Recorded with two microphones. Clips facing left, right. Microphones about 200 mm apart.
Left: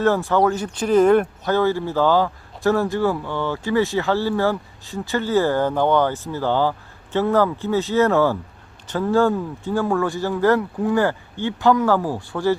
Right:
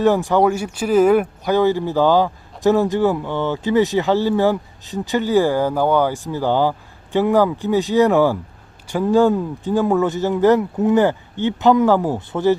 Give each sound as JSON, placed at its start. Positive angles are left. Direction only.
{"t": 0.0, "sound": "speech", "side_deg": -15}